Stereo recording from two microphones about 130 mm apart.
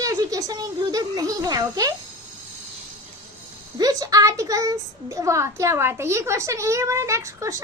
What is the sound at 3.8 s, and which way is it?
A woman's voice, 30° right (ahead or behind).